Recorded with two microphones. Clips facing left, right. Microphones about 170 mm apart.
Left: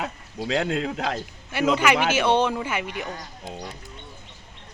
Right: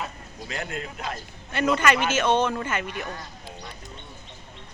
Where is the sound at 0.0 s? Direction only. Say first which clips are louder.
Left 5 dB; 90° left.